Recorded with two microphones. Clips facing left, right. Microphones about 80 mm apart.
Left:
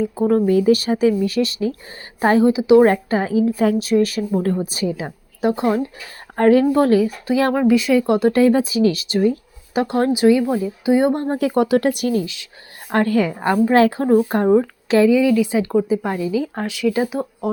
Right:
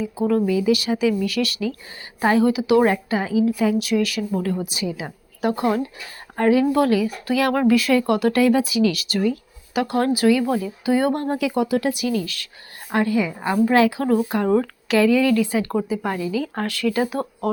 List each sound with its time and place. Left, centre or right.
0.0 s speech: left
2.8 s speech: left
5.0 s speech: left
6.3 s speech: left
7.5 s speech: centre
11.3 s speech: left
12.2 s speech: left
12.9 s speech: left
13.7 s speech: left
14.4 s speech: centre